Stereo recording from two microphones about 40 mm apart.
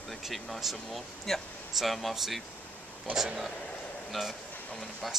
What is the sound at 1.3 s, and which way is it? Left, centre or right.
Speech, centre.